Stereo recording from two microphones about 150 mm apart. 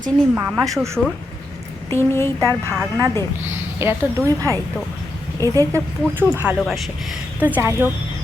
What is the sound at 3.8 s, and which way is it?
Speech, 15° right (ahead or behind).